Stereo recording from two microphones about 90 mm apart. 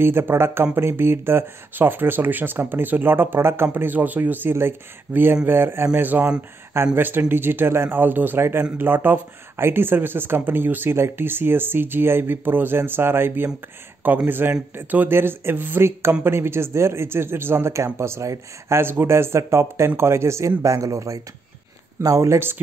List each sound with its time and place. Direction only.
0.0 s speech: 25° right (ahead or behind)